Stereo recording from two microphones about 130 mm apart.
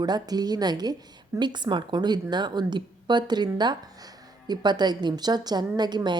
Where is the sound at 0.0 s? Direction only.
30° right (ahead or behind).